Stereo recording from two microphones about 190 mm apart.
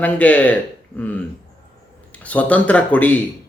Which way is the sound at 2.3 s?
5° left (ahead or behind).